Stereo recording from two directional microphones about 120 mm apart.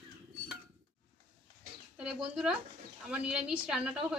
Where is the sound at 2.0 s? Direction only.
5° right (ahead or behind).